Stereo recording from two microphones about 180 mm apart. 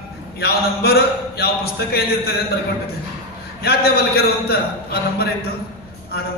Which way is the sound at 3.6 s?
60° left (ahead or behind).